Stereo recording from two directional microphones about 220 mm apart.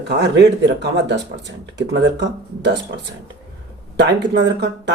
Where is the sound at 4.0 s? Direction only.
50° right (ahead or behind).